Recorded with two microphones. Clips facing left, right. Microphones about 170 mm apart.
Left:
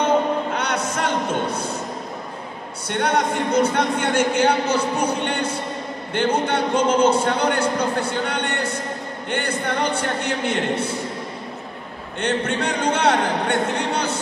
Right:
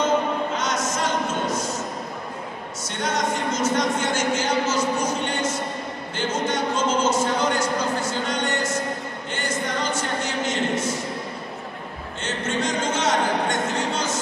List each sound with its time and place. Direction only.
0.6 s a sound: 60° left (ahead or behind)
2.9 s speech: 60° left (ahead or behind)
12.2 s speech: 60° left (ahead or behind)